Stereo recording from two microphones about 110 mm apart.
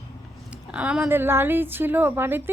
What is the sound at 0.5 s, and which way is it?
Speech, 10° right (ahead or behind).